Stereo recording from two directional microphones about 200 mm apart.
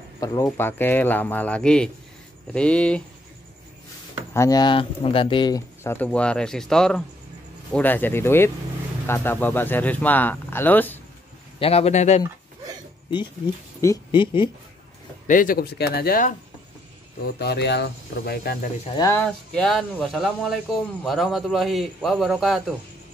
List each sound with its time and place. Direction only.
0.2 s a man's voice: 15° left (ahead or behind)
4.3 s speech: 15° left (ahead or behind)
5.9 s a man's voice: 5° left (ahead or behind)
11.6 s speech: 30° left (ahead or behind)
13.7 s speech: 20° left (ahead or behind)
15.2 s speech: 45° left (ahead or behind)
17.4 s speech: 55° left (ahead or behind)
18.9 s speech: 20° left (ahead or behind)
19.1 s a man's voice: 5° left (ahead or behind)